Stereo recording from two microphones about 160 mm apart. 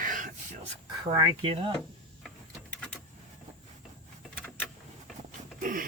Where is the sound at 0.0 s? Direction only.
55° right (ahead or behind).